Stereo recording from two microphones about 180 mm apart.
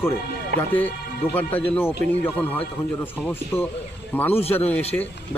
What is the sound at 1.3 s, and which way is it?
Speech, 10° left (ahead or behind).